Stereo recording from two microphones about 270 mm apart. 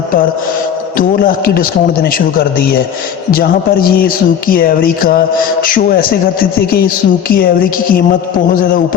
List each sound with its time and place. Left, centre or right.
0.9 s speech: left